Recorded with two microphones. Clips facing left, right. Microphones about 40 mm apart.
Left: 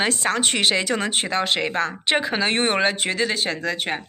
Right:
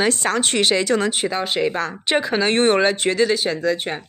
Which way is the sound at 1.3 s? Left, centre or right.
Left.